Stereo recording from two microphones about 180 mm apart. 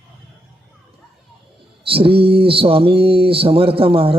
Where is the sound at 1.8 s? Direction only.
30° right (ahead or behind).